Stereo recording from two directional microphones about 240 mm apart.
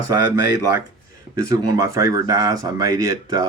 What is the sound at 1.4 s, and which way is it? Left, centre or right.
Speech, centre.